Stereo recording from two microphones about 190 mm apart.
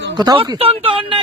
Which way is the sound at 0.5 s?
30° right (ahead or behind).